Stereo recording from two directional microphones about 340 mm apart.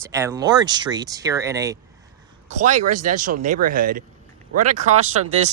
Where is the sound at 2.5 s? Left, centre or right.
Right.